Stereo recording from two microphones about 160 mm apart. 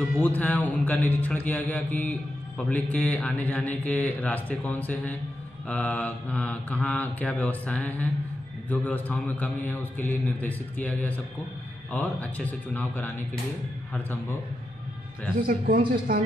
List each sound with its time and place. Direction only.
0.2 s mantra: 10° left (ahead or behind)
15.4 s a man's voice: 65° right (ahead or behind)